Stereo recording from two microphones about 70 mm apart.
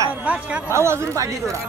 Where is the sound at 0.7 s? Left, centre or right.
Right.